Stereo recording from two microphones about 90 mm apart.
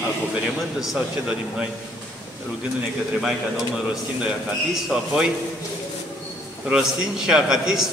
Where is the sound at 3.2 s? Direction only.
5° right (ahead or behind).